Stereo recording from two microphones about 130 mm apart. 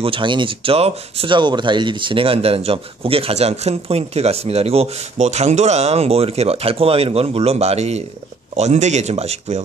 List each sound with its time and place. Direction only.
0.0 s speech: 40° right (ahead or behind)